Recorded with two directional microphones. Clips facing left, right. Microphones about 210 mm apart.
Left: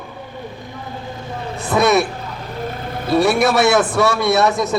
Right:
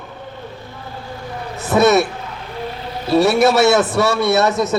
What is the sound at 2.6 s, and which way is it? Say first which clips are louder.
Vehicle: left 1 dB; 50° left (ahead or behind).